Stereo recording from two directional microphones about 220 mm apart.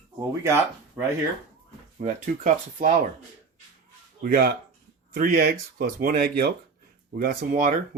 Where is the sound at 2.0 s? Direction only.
35° right (ahead or behind).